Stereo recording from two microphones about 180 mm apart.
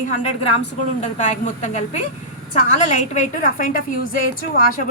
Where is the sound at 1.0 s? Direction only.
40° left (ahead or behind).